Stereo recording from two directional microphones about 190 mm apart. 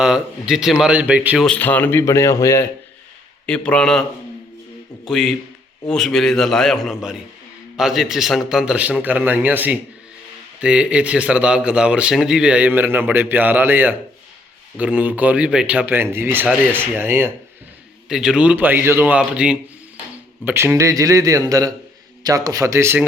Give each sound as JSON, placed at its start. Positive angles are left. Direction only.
{"t": 0.0, "sound": "a man's voice", "side_deg": -5}
{"t": 1.5, "sound": "speech", "side_deg": 10}
{"t": 3.4, "sound": "a man's voice", "side_deg": 5}
{"t": 5.0, "sound": "a man's voice", "side_deg": 0}